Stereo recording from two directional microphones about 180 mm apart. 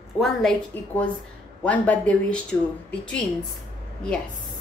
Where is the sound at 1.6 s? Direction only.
5° left (ahead or behind).